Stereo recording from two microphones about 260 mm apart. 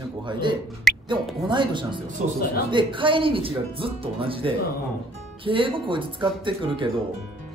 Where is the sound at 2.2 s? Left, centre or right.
Right.